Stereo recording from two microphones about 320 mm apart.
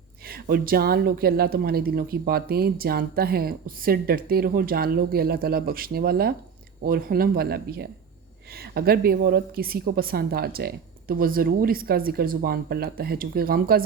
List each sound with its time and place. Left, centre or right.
0.3 s speech: right